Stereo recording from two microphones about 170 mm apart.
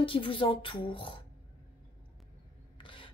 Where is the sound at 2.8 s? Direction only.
30° left (ahead or behind).